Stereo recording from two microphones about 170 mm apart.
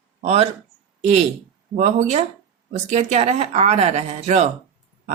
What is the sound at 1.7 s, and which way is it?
Speech, 45° right (ahead or behind).